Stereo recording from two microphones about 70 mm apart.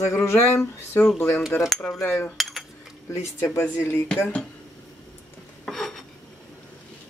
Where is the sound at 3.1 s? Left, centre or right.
Left.